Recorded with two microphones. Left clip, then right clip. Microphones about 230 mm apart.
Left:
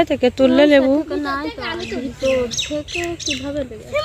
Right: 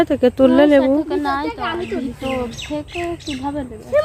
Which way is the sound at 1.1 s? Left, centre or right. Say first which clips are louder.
Right 3 dB; right.